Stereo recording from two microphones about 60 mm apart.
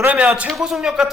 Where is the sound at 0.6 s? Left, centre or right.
Centre.